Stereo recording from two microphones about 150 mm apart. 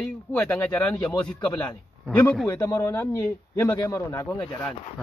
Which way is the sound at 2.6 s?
20° left (ahead or behind).